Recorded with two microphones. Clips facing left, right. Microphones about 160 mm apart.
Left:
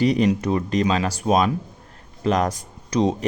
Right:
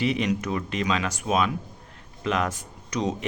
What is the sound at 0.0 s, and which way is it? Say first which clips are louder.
Speech: left 6 dB; 40° left (ahead or behind).